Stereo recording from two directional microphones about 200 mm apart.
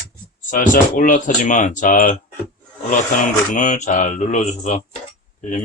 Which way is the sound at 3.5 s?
35° left (ahead or behind).